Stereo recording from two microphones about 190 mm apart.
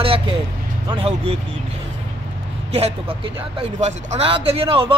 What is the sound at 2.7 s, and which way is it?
Speech, 30° right (ahead or behind).